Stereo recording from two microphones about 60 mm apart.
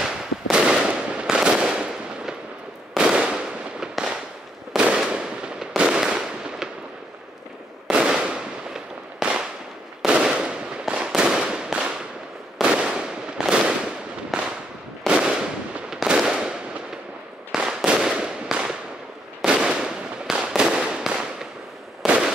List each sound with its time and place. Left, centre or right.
0.0 s fireworks: centre
7.9 s fireworks: centre
11.1 s firecracker: centre
12.6 s fireworks: centre
15.0 s firecracker: centre
15.9 s fireworks: centre
17.6 s firecracker: centre
19.4 s fireworks: centre